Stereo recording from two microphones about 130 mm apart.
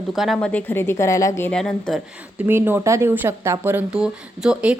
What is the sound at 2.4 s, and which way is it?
Speech, 15° right (ahead or behind).